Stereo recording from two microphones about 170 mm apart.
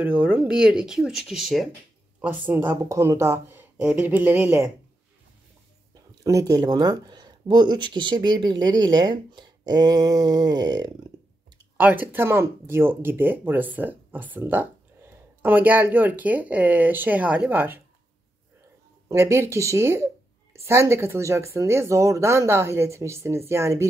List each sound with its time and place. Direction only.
0.0 s speech: 10° right (ahead or behind)
2.2 s speech: 10° right (ahead or behind)
6.2 s speech: 20° right (ahead or behind)
11.7 s speech: 10° right (ahead or behind)
19.0 s speech: 15° right (ahead or behind)